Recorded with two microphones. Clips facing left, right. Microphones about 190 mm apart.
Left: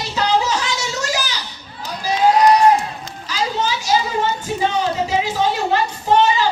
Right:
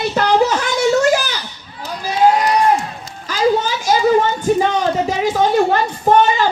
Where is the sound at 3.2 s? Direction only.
50° right (ahead or behind).